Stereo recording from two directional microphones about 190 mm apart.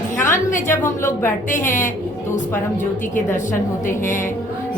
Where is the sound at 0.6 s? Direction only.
15° left (ahead or behind).